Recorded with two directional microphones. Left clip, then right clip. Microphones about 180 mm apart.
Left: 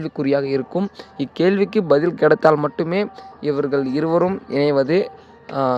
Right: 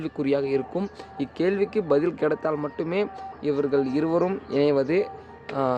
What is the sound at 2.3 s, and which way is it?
Speech, 50° left (ahead or behind).